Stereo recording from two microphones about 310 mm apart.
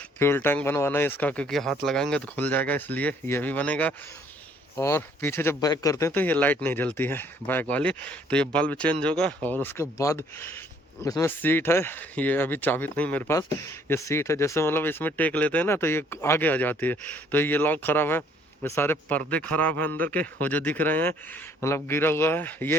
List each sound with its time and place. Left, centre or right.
0.2 s speech: centre